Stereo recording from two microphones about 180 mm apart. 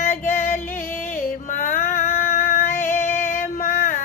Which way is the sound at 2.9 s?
15° left (ahead or behind).